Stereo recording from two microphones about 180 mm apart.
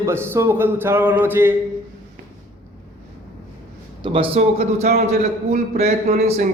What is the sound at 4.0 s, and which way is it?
Speech, 30° right (ahead or behind).